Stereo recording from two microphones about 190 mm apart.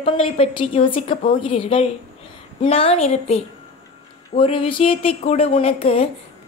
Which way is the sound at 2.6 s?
30° left (ahead or behind).